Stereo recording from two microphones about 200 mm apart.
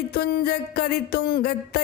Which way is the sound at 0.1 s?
50° left (ahead or behind).